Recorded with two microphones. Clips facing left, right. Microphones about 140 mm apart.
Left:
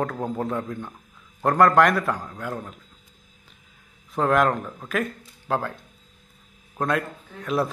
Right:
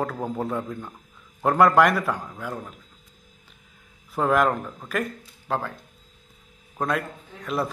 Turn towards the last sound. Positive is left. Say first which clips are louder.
# left 3 dB
turn(degrees=0)  # may be behind; listen again after turning